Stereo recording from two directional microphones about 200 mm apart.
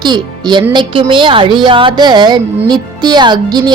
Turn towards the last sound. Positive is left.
turn(degrees=-20)  # may be behind; listen again after turning